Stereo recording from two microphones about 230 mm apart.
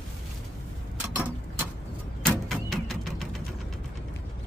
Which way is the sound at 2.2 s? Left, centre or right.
Centre.